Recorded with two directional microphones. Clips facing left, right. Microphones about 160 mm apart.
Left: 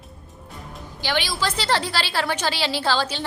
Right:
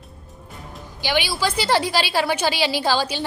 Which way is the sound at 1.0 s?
15° right (ahead or behind).